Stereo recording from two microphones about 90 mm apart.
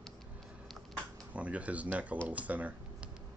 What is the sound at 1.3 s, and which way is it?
Speech, 15° right (ahead or behind).